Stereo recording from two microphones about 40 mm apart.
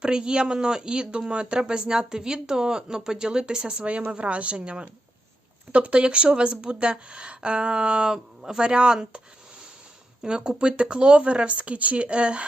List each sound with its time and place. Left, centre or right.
0.0 s a woman's voice: right
10.2 s speech: centre